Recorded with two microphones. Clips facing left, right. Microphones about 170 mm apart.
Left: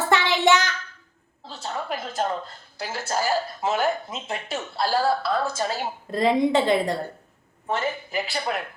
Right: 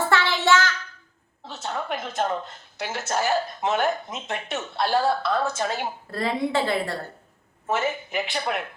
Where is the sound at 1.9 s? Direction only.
Centre (ahead or behind).